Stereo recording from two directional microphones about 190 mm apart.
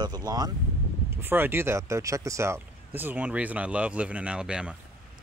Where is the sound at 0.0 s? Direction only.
20° right (ahead or behind).